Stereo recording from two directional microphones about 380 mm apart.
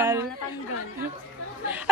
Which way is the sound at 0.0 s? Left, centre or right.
Centre.